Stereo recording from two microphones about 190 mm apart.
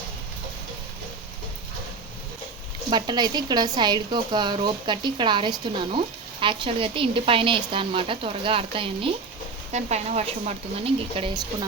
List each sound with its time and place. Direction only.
2.9 s a woman's voice: 20° right (ahead or behind)